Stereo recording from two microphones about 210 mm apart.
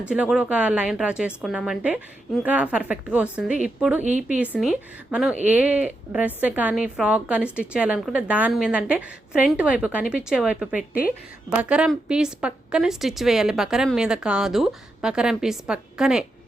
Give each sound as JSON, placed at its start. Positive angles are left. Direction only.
{"t": 0.1, "sound": "speech", "side_deg": -5}
{"t": 4.0, "sound": "a woman's voice", "side_deg": -35}
{"t": 4.5, "sound": "speech", "side_deg": -5}
{"t": 10.8, "sound": "speech", "side_deg": 45}
{"t": 11.5, "sound": "speech", "side_deg": -5}